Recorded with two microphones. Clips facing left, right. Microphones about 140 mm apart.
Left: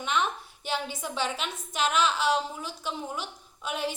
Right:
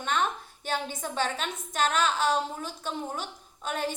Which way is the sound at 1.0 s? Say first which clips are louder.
Right 1 dB; 45° right (ahead or behind).